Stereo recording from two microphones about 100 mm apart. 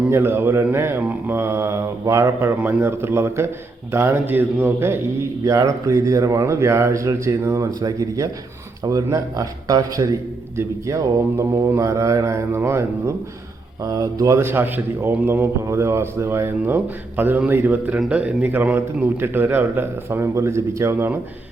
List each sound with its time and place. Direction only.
0.1 s a man's voice: 25° right (ahead or behind)
2.6 s a man's voice: 20° right (ahead or behind)
5.5 s a man's voice: 35° right (ahead or behind)